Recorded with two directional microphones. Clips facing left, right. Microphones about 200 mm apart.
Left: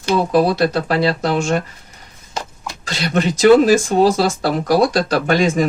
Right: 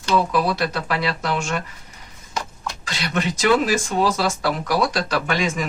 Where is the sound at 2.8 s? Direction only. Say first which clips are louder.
Left 6 dB; 40° left (ahead or behind).